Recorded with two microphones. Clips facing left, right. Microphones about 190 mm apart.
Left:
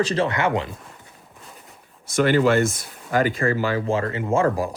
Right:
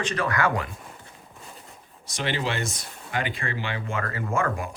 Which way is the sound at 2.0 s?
50° left (ahead or behind).